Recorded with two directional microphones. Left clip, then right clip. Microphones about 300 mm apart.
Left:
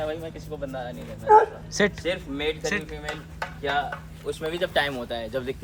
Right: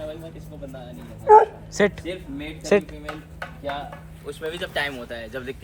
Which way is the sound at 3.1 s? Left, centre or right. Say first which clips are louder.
Left 2 dB; left.